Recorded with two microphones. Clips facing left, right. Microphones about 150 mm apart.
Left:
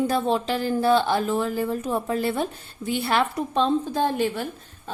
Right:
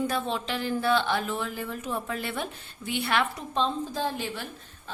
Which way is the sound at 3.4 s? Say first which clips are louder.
Left 6 dB; 55° left (ahead or behind).